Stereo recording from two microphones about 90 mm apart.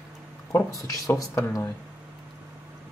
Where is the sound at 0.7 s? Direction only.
40° left (ahead or behind).